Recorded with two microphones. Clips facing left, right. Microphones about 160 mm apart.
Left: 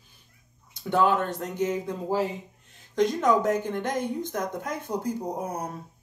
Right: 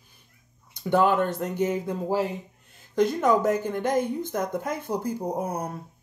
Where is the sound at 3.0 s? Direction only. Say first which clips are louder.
Right 1 dB; 5° right (ahead or behind).